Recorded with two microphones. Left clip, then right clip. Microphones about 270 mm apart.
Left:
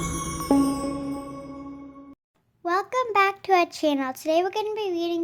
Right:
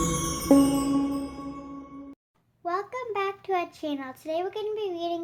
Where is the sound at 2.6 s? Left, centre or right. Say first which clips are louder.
Left 6 dB; left.